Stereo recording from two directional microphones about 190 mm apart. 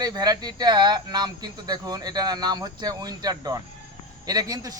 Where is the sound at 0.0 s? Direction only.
20° right (ahead or behind).